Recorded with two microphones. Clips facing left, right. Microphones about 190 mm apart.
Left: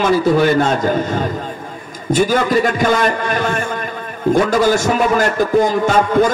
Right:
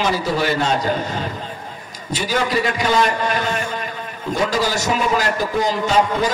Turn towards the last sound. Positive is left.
turn(degrees=50)  # may be behind; listen again after turning